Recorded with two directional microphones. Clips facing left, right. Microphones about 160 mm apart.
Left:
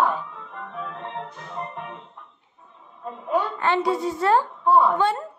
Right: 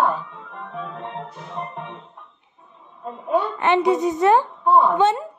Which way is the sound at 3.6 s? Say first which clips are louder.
Right 4 dB; 20° right (ahead or behind).